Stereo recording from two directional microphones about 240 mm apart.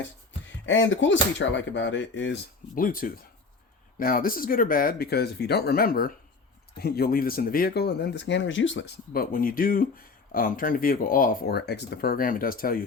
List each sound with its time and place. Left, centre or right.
0.4 s speech: left